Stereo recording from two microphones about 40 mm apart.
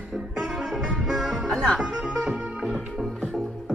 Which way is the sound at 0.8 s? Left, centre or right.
Centre.